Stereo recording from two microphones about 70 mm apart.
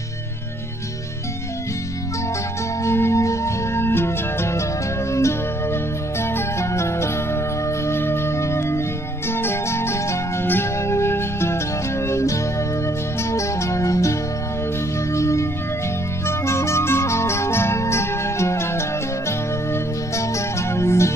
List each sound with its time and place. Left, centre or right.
2.8 s music: left
15.1 s music: left